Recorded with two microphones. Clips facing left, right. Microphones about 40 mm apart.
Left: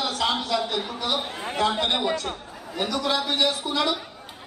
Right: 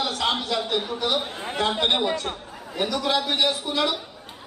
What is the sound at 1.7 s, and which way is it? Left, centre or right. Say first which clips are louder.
A man's voice: right 1 dB; centre.